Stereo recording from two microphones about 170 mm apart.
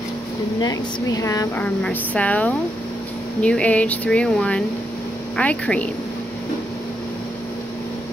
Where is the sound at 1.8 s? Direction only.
5° left (ahead or behind).